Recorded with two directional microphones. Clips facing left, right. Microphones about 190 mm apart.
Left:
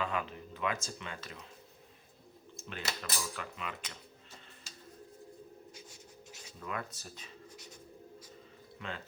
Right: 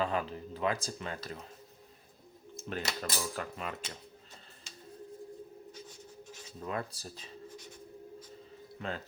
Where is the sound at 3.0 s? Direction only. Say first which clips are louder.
Right 4 dB; 40° right (ahead or behind).